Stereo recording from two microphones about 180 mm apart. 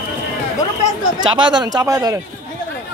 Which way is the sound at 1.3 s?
25° right (ahead or behind).